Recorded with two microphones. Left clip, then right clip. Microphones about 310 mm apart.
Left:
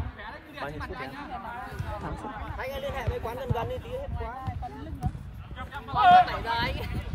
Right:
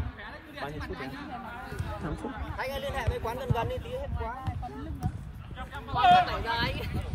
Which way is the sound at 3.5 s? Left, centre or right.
Right.